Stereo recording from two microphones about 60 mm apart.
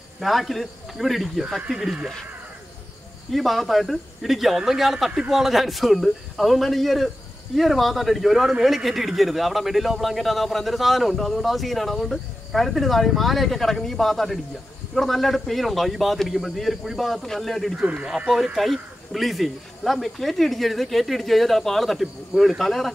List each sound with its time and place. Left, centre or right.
0.2 s speech: centre
3.3 s speech: centre
17.7 s speech: centre